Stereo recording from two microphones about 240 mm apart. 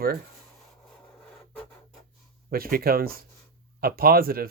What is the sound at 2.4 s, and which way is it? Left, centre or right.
Speech, right.